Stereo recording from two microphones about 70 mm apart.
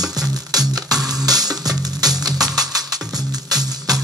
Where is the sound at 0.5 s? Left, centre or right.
Right.